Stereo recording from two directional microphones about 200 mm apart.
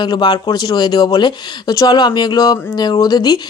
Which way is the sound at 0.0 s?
20° left (ahead or behind).